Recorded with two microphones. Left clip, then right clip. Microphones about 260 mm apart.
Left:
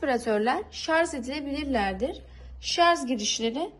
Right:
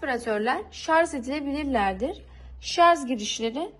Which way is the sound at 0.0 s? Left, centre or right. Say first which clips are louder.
Left 1 dB; centre.